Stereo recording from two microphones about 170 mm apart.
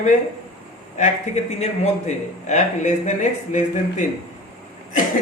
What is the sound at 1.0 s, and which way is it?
A man's voice, 40° left (ahead or behind).